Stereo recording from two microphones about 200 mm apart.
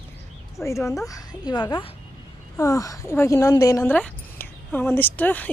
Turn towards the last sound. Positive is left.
turn(degrees=10)  # may be behind; listen again after turning